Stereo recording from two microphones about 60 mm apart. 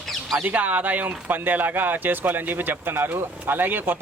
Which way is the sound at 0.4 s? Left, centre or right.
Right.